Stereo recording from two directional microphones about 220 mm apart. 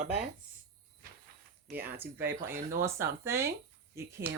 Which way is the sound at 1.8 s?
10° right (ahead or behind).